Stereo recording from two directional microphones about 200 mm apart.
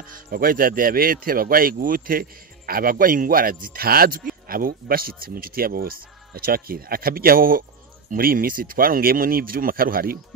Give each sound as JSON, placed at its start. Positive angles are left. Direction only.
{"t": 0.0, "sound": "speech", "side_deg": -45}